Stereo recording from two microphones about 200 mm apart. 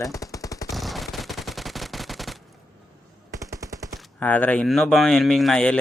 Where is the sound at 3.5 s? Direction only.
15° right (ahead or behind).